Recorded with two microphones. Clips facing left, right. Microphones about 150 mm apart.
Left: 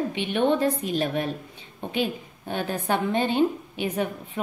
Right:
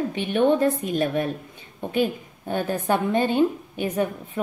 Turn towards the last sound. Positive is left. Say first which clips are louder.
# right 3 dB
turn(degrees=-45)  # may be behind; listen again after turning